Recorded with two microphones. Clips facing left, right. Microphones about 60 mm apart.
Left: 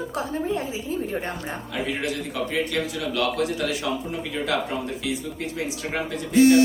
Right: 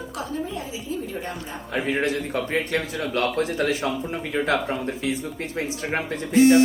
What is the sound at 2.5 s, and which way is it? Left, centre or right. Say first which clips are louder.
A man's voice: even; right.